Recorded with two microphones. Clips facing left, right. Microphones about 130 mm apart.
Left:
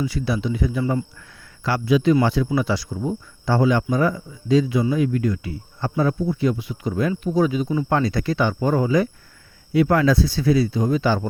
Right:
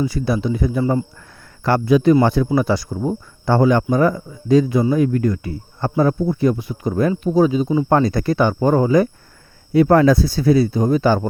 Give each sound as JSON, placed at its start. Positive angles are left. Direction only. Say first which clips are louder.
{"t": 0.0, "sound": "speech", "louder": "right 4 dB", "side_deg": -40}
{"t": 1.6, "sound": "speech", "louder": "right 4 dB", "side_deg": -50}
{"t": 7.1, "sound": "speech", "louder": "right 5 dB", "side_deg": -30}